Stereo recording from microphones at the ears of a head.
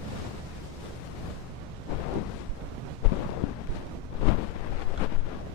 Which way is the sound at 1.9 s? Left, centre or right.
Left.